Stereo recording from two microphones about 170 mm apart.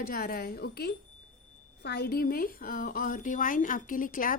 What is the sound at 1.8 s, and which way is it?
A woman's voice, 80° left.